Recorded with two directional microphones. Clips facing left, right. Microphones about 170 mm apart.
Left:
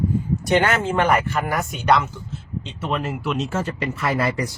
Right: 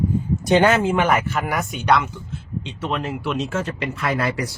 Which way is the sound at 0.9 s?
Centre (ahead or behind).